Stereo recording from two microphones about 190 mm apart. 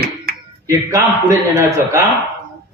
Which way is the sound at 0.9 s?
15° right (ahead or behind).